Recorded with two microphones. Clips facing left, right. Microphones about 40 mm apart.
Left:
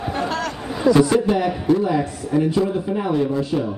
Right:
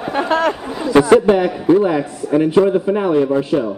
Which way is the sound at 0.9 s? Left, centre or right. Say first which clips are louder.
Right 9 dB; right.